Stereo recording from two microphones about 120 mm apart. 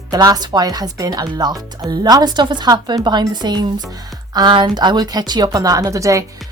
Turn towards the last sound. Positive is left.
turn(degrees=-25)  # may be behind; listen again after turning